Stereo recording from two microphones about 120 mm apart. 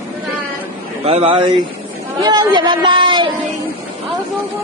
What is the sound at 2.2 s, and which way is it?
Speech, 35° right (ahead or behind).